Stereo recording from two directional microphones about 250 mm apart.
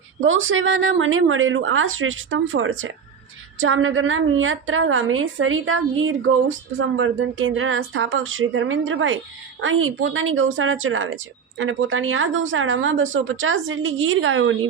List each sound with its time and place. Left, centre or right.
0.2 s a woman's voice: right